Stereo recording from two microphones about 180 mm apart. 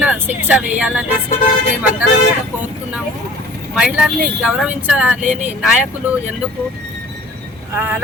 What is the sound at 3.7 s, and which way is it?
Speech, 5° right (ahead or behind).